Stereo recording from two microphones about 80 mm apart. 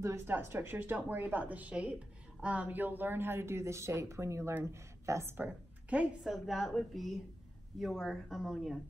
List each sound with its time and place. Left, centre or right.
0.0 s speech: right
0.3 s a woman's voice: right
5.4 s a woman's voice: centre
6.2 s a woman's voice: centre